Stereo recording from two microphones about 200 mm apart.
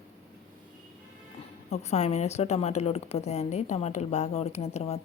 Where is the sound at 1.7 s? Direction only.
35° left (ahead or behind).